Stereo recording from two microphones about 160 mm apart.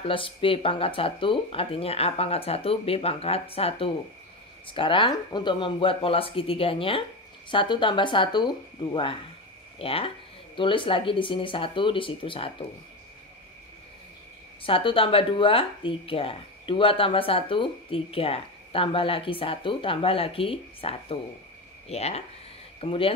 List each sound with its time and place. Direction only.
0.0 s speech: 35° left (ahead or behind)
14.6 s speech: 35° left (ahead or behind)